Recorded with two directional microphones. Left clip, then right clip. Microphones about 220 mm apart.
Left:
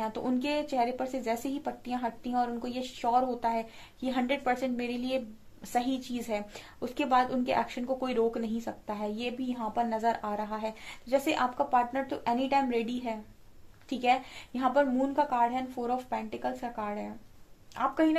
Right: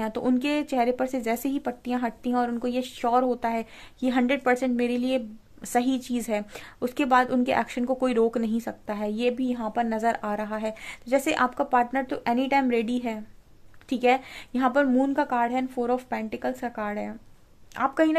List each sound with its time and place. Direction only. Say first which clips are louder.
0.0 s speech: right 5 dB; 45° right (ahead or behind)